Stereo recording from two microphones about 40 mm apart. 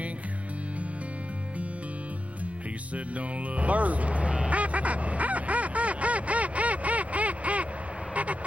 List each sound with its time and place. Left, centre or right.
3.2 s quack: right
8.1 s vehicle: right